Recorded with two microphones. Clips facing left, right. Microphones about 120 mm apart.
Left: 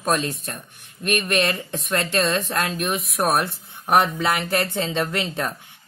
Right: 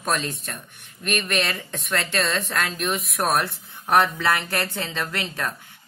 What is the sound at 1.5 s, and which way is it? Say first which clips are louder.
Speech: left 2 dB; 25° left (ahead or behind).